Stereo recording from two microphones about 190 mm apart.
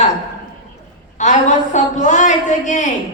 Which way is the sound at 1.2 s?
40° left (ahead or behind).